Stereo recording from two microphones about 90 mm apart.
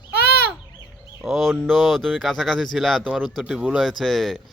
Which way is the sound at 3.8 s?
5° left (ahead or behind).